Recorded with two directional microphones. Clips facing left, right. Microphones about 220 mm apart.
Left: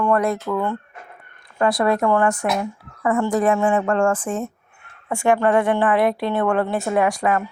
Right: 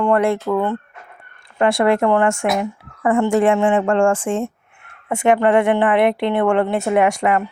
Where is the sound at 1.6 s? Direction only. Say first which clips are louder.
Right 3 dB; 25° right (ahead or behind).